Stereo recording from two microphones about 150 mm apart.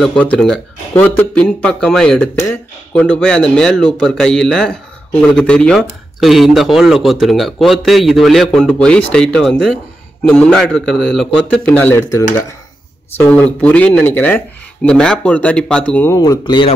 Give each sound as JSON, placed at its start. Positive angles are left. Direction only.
{"t": 0.0, "sound": "speech", "side_deg": 5}
{"t": 13.1, "sound": "speech", "side_deg": 10}
{"t": 16.2, "sound": "speech", "side_deg": 30}